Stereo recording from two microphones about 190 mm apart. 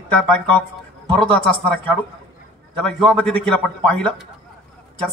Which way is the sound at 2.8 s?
5° left (ahead or behind).